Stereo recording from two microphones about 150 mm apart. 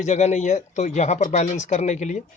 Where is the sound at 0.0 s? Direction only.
50° left (ahead or behind).